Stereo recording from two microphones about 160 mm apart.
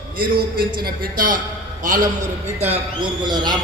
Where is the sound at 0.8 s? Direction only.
65° right (ahead or behind).